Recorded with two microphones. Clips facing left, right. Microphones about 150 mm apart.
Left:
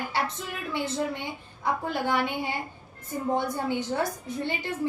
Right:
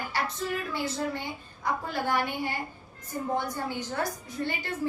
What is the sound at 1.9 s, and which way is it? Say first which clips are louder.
Speech: left 2 dB; 20° left (ahead or behind).